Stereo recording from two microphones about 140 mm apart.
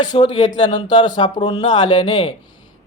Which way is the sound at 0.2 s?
30° left (ahead or behind).